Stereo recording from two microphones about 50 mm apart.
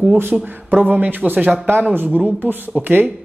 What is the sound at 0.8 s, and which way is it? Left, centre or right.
A man's voice, right.